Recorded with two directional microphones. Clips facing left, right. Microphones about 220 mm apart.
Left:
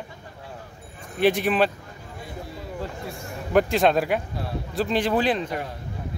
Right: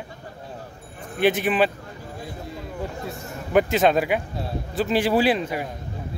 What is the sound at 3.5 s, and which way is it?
A man's voice, centre (ahead or behind).